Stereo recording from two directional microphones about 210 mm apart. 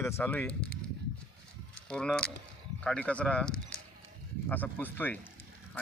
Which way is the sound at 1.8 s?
5° left (ahead or behind).